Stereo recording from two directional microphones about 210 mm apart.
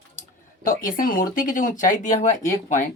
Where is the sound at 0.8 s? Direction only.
40° left (ahead or behind).